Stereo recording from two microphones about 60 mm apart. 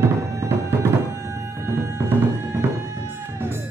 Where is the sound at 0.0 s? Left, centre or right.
Right.